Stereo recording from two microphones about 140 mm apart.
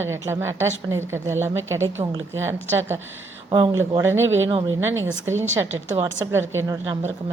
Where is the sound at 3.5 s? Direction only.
35° right (ahead or behind).